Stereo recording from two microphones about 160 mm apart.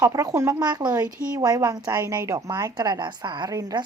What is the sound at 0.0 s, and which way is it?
A woman's voice, 20° right (ahead or behind).